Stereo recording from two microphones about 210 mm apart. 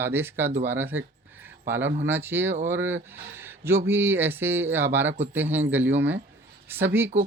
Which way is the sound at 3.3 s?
10° right (ahead or behind).